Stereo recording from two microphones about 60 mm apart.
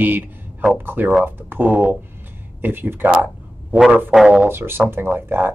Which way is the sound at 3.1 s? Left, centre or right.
Right.